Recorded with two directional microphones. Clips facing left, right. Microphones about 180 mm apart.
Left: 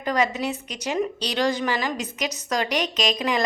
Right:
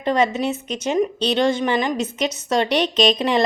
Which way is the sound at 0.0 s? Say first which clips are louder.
Right 4 dB; 25° right (ahead or behind).